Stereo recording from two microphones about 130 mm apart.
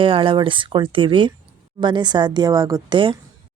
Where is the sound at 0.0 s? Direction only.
40° right (ahead or behind).